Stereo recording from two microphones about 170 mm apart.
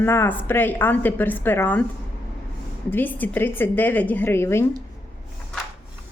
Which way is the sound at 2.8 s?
10° left (ahead or behind).